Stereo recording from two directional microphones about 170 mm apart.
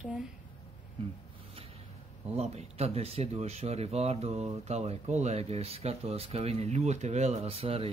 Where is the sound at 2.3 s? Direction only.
35° right (ahead or behind).